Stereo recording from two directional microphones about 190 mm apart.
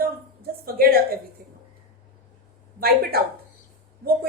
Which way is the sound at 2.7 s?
55° right (ahead or behind).